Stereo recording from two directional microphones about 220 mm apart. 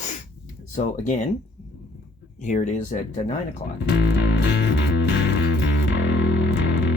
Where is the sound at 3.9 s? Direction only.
50° left (ahead or behind).